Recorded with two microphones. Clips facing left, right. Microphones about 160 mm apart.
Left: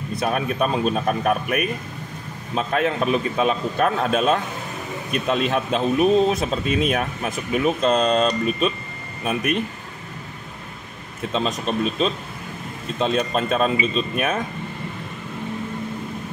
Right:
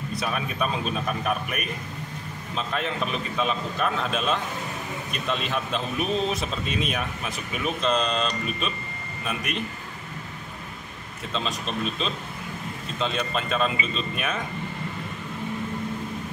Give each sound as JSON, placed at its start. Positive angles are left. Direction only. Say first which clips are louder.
{"t": 0.1, "sound": "speech", "louder": "left 7 dB", "side_deg": 50}
{"t": 11.3, "sound": "speech", "louder": "left 6 dB", "side_deg": 50}